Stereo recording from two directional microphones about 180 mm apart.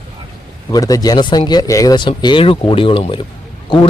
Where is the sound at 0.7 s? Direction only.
20° left (ahead or behind).